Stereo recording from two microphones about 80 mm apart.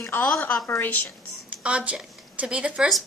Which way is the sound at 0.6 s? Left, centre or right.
Left.